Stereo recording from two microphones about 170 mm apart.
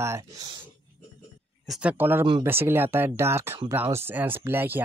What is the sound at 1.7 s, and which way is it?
Speech, 5° right (ahead or behind).